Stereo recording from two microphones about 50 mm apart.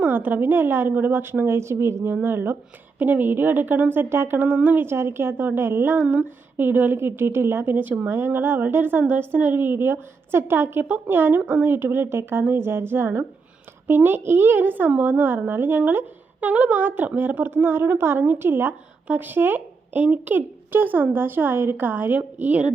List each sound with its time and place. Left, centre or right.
0.0 s a woman's voice: right
3.0 s a woman's voice: right
4.9 s a woman's voice: right
8.1 s a woman's voice: right
10.8 s a woman's voice: right
11.1 s a woman's voice: right
16.4 s a woman's voice: right
19.0 s a woman's voice: right